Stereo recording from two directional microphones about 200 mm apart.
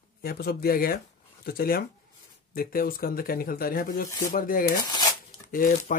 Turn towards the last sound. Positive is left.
turn(degrees=45)  # may be behind; listen again after turning